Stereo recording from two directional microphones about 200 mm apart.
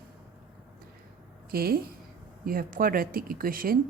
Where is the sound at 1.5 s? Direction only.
50° right (ahead or behind).